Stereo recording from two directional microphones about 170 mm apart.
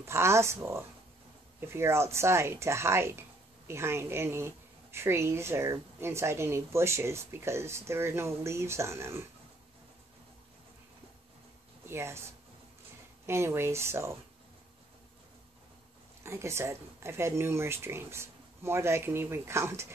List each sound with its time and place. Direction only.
0.0 s speech: 15° right (ahead or behind)
11.9 s speech: 15° right (ahead or behind)
13.3 s speech: 15° right (ahead or behind)
16.2 s speech: 15° right (ahead or behind)